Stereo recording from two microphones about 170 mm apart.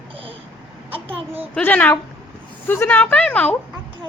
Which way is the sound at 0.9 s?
35° right (ahead or behind).